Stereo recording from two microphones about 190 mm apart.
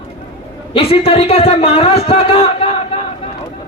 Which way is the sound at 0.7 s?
30° left (ahead or behind).